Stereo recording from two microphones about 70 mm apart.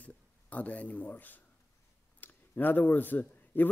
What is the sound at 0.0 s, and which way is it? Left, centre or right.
Speech, left.